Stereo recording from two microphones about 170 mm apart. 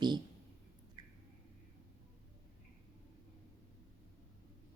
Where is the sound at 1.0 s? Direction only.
25° right (ahead or behind).